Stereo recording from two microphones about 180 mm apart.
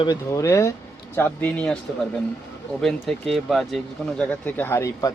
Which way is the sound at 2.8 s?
Centre (ahead or behind).